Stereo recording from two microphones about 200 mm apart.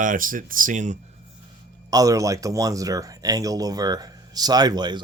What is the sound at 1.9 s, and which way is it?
Speech, 15° right (ahead or behind).